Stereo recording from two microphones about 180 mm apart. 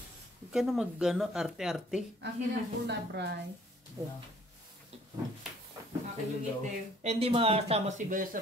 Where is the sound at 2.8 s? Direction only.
70° right (ahead or behind).